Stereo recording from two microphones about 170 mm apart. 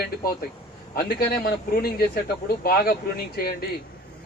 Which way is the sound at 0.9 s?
60° left (ahead or behind).